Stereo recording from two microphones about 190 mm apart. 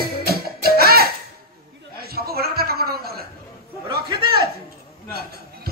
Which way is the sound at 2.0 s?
55° right (ahead or behind).